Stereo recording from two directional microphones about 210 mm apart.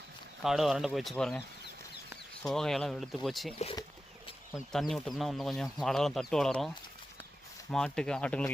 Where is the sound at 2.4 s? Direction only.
Centre (ahead or behind).